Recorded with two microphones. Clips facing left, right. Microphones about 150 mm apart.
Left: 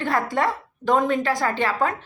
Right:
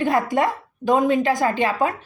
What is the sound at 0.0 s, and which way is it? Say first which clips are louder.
A woman's voice: right 3 dB; 15° right (ahead or behind).